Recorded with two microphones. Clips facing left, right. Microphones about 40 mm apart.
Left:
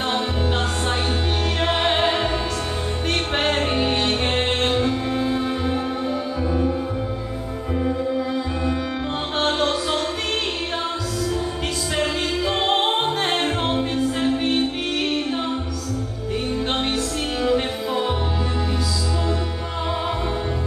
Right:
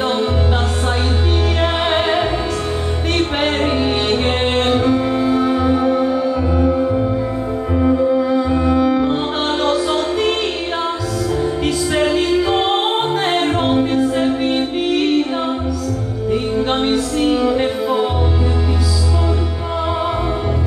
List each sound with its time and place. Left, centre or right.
0.0 s music: centre
1.6 s music: centre
6.6 s music: centre
11.6 s music: centre